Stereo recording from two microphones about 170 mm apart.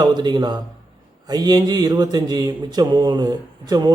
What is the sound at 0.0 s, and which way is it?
Mantra, 25° right (ahead or behind).